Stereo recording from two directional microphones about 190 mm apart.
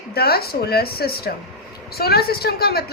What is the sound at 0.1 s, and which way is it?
A woman's voice, 55° left (ahead or behind).